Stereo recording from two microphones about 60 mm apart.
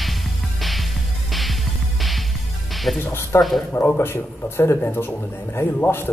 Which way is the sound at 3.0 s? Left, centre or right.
Left.